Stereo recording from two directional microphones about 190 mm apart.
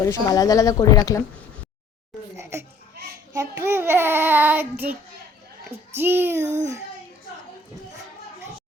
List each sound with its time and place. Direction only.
0.0 s a woman's voice: 20° left (ahead or behind)
2.4 s crying: 15° right (ahead or behind)
3.3 s a child's voice: 15° right (ahead or behind)